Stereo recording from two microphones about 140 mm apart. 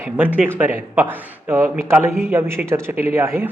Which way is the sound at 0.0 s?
15° right (ahead or behind).